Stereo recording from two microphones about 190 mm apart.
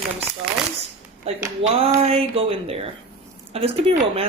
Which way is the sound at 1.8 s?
30° right (ahead or behind).